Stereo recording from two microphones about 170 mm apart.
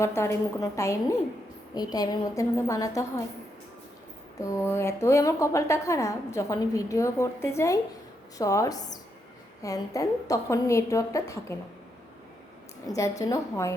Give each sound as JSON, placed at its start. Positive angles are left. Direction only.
{"t": 0.0, "sound": "a woman's voice", "side_deg": 15}
{"t": 4.4, "sound": "a woman's voice", "side_deg": 15}
{"t": 12.9, "sound": "a woman's voice", "side_deg": 20}